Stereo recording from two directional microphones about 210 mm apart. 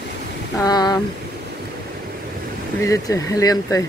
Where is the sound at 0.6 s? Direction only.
15° left (ahead or behind).